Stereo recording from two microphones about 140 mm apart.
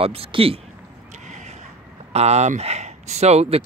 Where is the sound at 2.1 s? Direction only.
50° right (ahead or behind).